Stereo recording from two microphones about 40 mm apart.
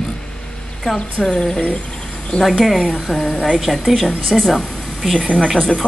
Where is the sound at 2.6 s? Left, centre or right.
Centre.